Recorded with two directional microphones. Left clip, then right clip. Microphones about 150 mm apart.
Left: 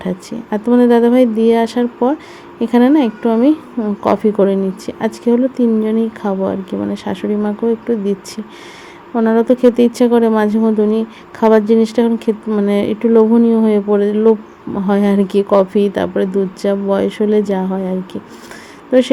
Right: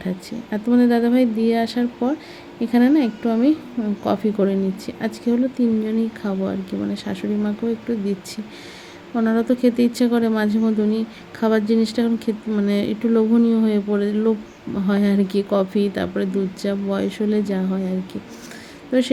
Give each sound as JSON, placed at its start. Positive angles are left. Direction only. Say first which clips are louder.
{"t": 0.0, "sound": "speech", "louder": "left 6 dB", "side_deg": 25}
{"t": 9.1, "sound": "speech", "louder": "left 8 dB", "side_deg": 15}